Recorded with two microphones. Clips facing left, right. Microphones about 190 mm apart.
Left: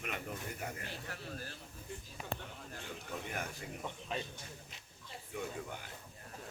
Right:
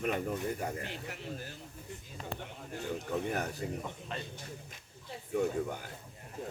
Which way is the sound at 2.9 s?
40° right (ahead or behind).